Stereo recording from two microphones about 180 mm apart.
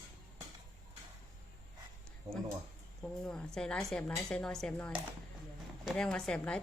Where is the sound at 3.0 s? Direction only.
5° left (ahead or behind).